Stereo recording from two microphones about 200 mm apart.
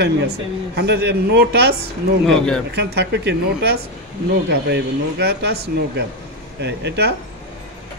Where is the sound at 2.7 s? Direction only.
55° right (ahead or behind).